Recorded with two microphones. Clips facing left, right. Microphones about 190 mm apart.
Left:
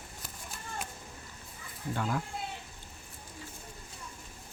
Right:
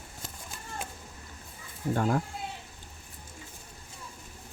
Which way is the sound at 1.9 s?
45° right (ahead or behind).